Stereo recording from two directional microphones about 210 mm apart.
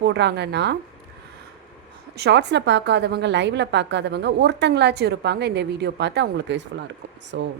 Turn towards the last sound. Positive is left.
turn(degrees=-60)  # may be behind; listen again after turning